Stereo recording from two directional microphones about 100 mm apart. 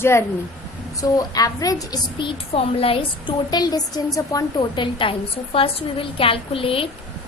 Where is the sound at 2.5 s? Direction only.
75° left (ahead or behind).